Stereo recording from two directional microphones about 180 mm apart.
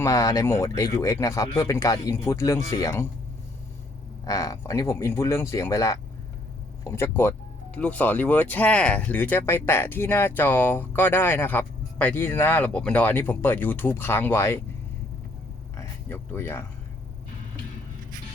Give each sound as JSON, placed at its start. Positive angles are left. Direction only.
{"t": 0.0, "sound": "speech", "side_deg": 20}
{"t": 4.3, "sound": "speech", "side_deg": 20}
{"t": 15.8, "sound": "speech", "side_deg": 10}